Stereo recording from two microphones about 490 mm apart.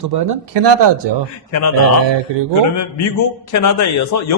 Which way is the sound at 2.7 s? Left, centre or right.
Left.